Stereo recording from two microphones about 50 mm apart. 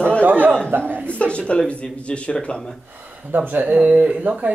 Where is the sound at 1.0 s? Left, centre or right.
Left.